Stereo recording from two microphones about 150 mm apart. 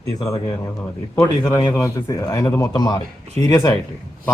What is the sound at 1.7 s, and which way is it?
A man's voice, 20° left (ahead or behind).